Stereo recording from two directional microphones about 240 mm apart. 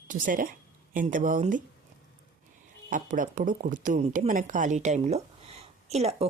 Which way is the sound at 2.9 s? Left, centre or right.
Right.